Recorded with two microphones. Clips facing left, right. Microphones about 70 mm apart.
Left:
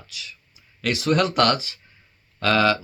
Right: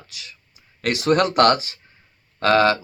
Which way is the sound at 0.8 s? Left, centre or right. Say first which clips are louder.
Right 3 dB; right.